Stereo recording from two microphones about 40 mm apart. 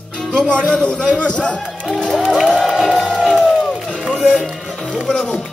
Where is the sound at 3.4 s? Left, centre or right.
Centre.